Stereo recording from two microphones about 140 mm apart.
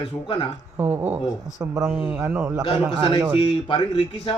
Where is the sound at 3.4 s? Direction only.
35° left (ahead or behind).